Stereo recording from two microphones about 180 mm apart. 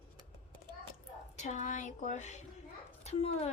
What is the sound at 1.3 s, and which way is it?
Speech, 40° left (ahead or behind).